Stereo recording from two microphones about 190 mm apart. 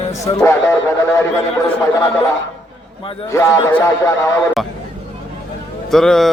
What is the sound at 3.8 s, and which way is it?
Speech, 15° left (ahead or behind).